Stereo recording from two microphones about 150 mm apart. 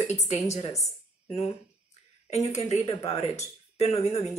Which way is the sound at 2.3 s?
50° left (ahead or behind).